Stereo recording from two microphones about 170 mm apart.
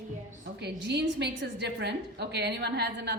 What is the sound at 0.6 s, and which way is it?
A woman's voice, 80° right.